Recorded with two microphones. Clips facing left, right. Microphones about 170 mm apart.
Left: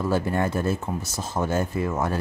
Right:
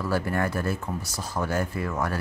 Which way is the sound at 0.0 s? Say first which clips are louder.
Left 3 dB; 20° left (ahead or behind).